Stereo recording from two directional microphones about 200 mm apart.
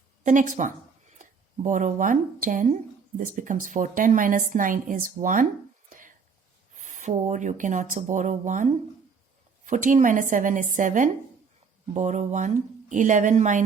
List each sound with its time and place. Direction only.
0.2 s a woman's voice: 40° right (ahead or behind)
5.9 s whispering: 40° right (ahead or behind)
6.7 s a woman's voice: 35° right (ahead or behind)